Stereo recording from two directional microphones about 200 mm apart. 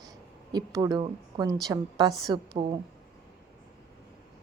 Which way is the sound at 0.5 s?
20° right (ahead or behind).